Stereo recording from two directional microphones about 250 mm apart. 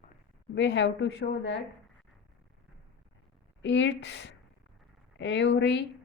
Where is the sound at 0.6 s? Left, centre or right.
Left.